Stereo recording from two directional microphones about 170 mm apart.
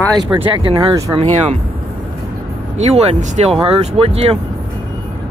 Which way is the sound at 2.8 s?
40° right (ahead or behind).